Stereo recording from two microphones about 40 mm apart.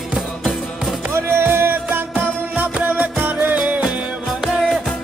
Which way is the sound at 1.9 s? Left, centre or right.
Right.